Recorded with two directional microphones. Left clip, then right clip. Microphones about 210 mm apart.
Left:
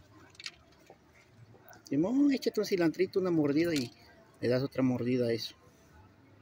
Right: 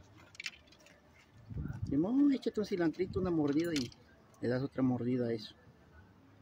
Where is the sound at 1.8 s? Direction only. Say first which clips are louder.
Left 2 dB; 10° right (ahead or behind).